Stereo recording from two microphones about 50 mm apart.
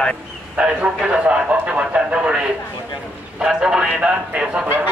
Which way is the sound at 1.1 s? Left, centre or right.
Right.